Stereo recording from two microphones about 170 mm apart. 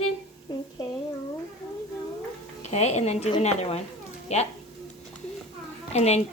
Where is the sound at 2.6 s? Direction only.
40° left (ahead or behind).